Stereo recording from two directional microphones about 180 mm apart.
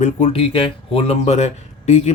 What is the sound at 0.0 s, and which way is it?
A man's voice, 35° left (ahead or behind).